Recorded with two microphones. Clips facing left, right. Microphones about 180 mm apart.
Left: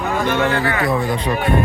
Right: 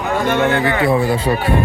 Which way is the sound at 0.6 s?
25° right (ahead or behind).